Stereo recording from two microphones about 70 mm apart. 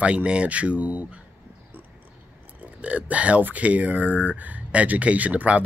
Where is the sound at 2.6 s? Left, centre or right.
Centre.